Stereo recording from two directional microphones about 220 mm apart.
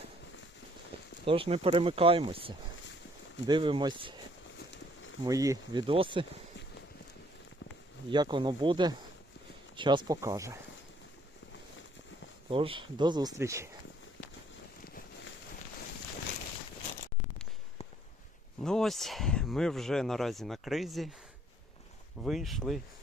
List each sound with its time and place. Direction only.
1.2 s speech: 25° right (ahead or behind)
5.2 s speech: 15° right (ahead or behind)
8.1 s speech: 20° right (ahead or behind)
12.5 s speech: 25° right (ahead or behind)
18.6 s speech: centre (ahead or behind)
22.2 s speech: centre (ahead or behind)